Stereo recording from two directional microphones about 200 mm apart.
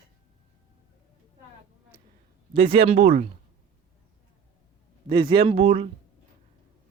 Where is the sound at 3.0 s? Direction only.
45° right (ahead or behind).